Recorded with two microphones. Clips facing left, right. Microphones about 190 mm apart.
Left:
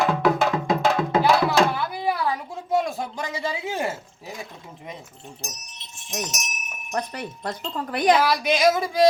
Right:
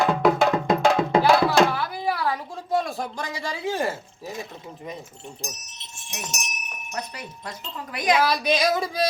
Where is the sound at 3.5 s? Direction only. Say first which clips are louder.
Right 2 dB; 20° left (ahead or behind).